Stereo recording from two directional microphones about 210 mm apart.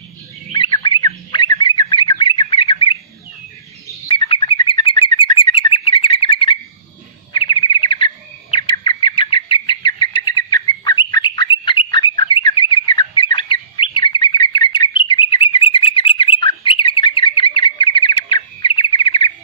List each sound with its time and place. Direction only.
0.5 s bird: 20° left (ahead or behind)
4.1 s bird: 25° left (ahead or behind)